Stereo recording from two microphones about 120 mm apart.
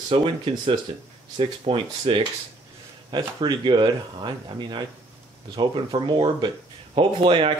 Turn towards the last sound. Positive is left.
turn(degrees=-45)  # may be behind; listen again after turning